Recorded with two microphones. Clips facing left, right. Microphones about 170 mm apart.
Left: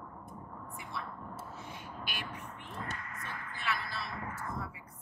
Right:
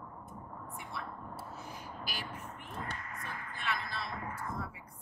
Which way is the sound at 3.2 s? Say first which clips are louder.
Even; centre (ahead or behind).